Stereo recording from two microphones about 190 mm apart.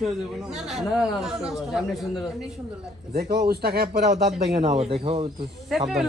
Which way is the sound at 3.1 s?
55° right (ahead or behind).